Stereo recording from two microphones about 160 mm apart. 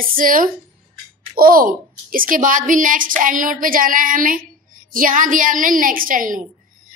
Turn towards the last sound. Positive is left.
turn(degrees=-60)  # may be behind; listen again after turning